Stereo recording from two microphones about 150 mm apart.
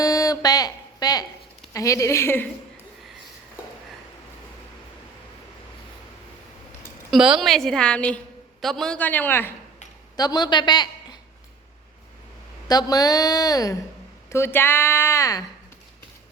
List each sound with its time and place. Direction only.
0.0 s a sound: 25° left (ahead or behind)
1.7 s a woman's voice: 20° left (ahead or behind)
7.1 s a woman's voice: 5° right (ahead or behind); by 9.5 s 15° left (ahead or behind)
10.2 s a woman's voice: 25° left (ahead or behind)
12.6 s a woman's voice: 25° left (ahead or behind)